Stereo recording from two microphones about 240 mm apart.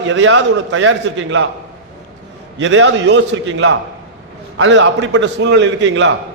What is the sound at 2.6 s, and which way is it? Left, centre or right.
A man's voice, right.